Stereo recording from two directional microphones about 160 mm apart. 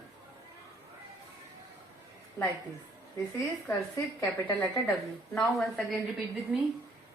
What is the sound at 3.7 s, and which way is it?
Speech, 20° left (ahead or behind).